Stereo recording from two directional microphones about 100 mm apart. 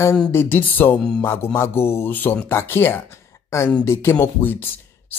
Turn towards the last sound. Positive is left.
turn(degrees=20)  # may be behind; listen again after turning